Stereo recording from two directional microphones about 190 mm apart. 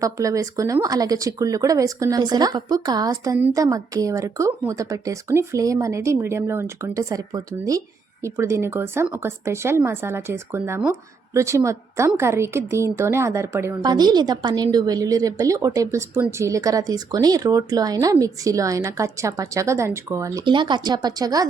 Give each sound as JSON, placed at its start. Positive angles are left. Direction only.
{"t": 0.0, "sound": "a woman's voice", "side_deg": -15}